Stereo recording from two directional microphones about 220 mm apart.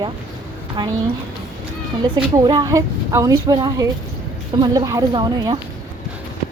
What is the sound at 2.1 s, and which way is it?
Speech, 20° right (ahead or behind).